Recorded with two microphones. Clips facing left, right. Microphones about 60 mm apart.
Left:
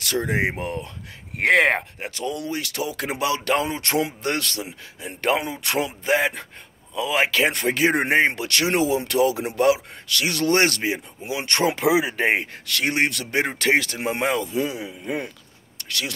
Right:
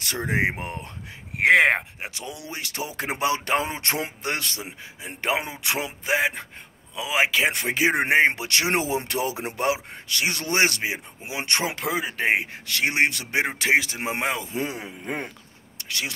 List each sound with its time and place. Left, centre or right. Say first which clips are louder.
0.0 s speech: left 2 dB; right
1.4 s speech: even; centre
11.7 s speech: left 7 dB; centre
12.6 s speech: even; right
14.4 s speech: left 4 dB; right
15.8 s a sound: even; centre